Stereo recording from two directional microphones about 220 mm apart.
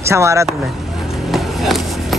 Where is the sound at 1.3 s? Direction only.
Centre (ahead or behind).